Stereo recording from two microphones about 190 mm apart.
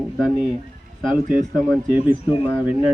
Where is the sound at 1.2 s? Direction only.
45° right (ahead or behind).